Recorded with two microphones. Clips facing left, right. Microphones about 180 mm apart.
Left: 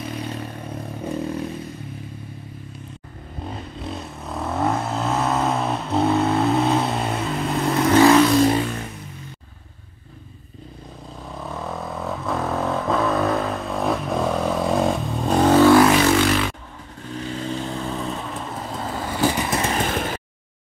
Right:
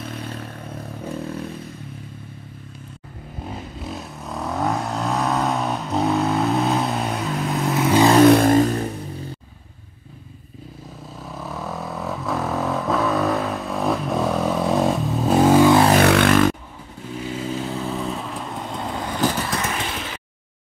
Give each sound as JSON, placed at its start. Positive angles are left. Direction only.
{"t": 0.0, "sound": "vehicle", "side_deg": 0}
{"t": 3.5, "sound": "vehicle", "side_deg": 0}
{"t": 8.3, "sound": "vehicle", "side_deg": -55}
{"t": 11.2, "sound": "vehicle", "side_deg": 0}
{"t": 16.0, "sound": "music", "side_deg": -60}
{"t": 17.1, "sound": "vehicle", "side_deg": -5}
{"t": 19.6, "sound": "a sound", "side_deg": 45}